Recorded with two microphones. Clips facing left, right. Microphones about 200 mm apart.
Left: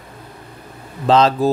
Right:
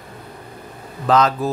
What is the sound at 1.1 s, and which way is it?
Speech, 30° left (ahead or behind).